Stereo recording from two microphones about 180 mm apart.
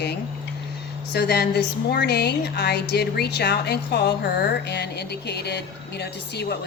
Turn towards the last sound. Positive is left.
turn(degrees=65)  # may be behind; listen again after turning